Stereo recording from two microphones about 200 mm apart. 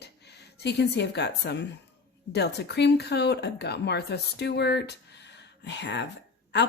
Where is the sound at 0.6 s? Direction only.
55° left (ahead or behind).